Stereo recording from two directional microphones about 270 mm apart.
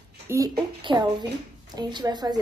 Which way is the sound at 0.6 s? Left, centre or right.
Centre.